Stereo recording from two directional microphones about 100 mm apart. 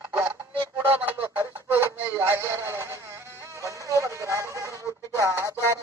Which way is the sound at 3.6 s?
30° right (ahead or behind).